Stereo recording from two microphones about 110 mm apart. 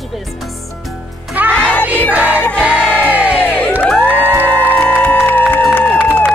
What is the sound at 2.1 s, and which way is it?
Music, 15° right (ahead or behind).